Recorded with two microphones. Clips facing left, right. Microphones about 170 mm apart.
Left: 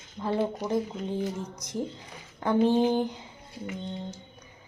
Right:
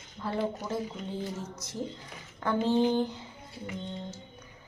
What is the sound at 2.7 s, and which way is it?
Speech, 15° left (ahead or behind).